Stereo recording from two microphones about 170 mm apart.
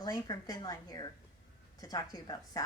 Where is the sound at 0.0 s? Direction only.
20° left (ahead or behind).